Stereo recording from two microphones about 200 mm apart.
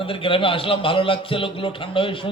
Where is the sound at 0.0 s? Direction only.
25° left (ahead or behind).